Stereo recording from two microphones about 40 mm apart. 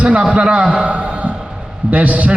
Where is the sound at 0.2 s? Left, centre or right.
Right.